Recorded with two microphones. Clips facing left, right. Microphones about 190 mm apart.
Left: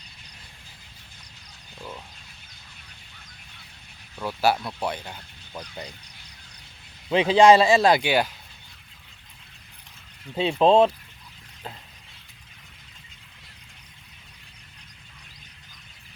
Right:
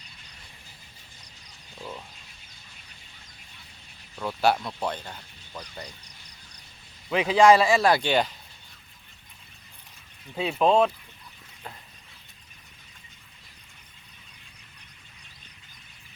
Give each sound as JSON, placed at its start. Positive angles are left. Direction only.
{"t": 4.2, "sound": "speech", "side_deg": 5}
{"t": 5.5, "sound": "speech", "side_deg": 20}
{"t": 7.1, "sound": "speech", "side_deg": 25}
{"t": 8.0, "sound": "speech", "side_deg": 5}
{"t": 10.6, "sound": "speech", "side_deg": 25}